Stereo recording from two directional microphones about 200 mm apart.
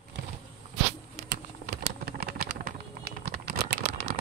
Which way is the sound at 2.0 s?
50° right (ahead or behind).